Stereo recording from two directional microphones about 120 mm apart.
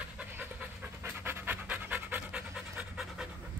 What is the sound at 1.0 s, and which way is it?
Pant, 20° right (ahead or behind).